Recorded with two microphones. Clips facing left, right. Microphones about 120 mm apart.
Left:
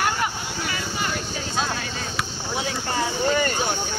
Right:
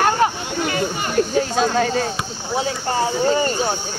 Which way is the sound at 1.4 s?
55° right (ahead or behind).